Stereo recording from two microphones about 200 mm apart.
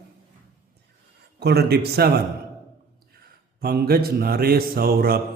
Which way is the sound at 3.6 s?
50° right (ahead or behind).